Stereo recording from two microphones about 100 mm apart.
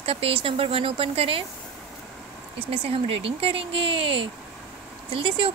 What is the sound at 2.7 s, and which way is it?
Speech, 75° right (ahead or behind).